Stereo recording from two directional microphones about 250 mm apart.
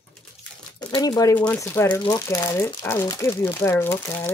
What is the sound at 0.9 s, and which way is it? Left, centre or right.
Speech, centre.